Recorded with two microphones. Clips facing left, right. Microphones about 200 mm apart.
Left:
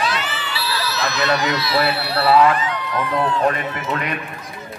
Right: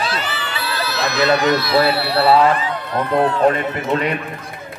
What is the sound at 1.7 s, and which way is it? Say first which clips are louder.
A man's voice: right 4 dB; 35° right (ahead or behind).